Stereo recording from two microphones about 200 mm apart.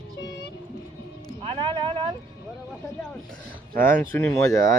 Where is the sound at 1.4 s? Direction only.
25° right (ahead or behind).